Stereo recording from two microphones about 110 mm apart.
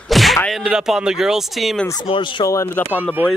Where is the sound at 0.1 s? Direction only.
Centre (ahead or behind).